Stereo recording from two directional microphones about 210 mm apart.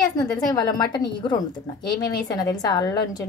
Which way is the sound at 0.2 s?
20° left (ahead or behind).